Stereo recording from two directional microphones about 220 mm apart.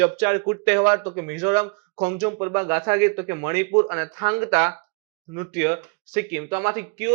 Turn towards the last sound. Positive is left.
turn(degrees=-15)  # may be behind; listen again after turning